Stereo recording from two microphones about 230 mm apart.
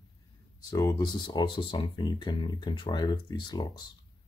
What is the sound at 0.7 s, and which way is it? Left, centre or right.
Speech, centre.